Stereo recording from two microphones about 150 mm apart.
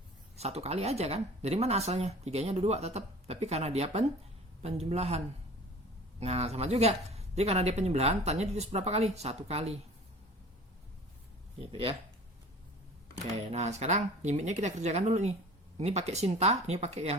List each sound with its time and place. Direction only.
0.3 s speech: 45° right (ahead or behind)
11.7 s speech: 35° right (ahead or behind)
13.5 s speech: 50° right (ahead or behind)